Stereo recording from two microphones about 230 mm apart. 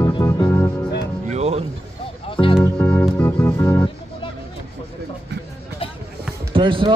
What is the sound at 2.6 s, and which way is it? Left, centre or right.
Music, centre.